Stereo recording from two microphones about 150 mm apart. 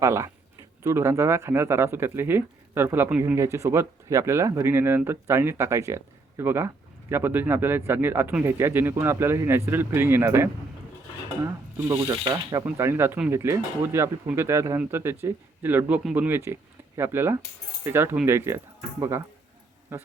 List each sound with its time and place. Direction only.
0.0 s speech: 20° right (ahead or behind)